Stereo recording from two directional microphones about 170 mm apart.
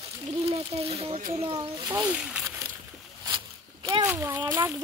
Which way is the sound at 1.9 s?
10° right (ahead or behind).